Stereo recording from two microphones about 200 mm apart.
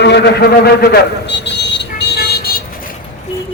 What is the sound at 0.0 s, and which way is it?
Vehicle, 60° left (ahead or behind).